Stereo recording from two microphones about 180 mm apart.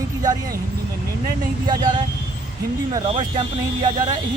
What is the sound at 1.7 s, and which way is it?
Speech, 25° right (ahead or behind).